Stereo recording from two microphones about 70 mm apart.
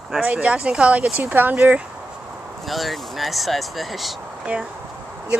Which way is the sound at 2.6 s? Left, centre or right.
Centre.